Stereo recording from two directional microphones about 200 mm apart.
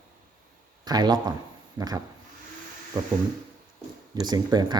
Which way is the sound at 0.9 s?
20° right (ahead or behind).